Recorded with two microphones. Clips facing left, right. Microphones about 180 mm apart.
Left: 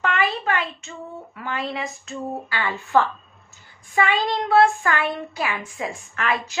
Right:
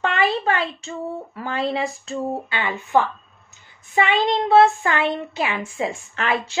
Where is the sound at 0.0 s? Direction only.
30° right (ahead or behind).